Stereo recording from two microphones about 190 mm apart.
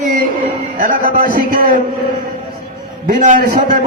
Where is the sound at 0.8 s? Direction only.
45° right (ahead or behind).